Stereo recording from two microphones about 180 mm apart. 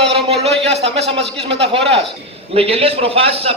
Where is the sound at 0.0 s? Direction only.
30° right (ahead or behind).